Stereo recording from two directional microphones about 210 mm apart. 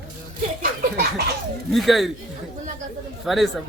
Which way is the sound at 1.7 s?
Centre (ahead or behind).